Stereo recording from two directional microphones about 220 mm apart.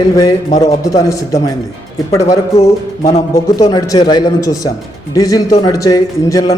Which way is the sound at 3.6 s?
15° left (ahead or behind).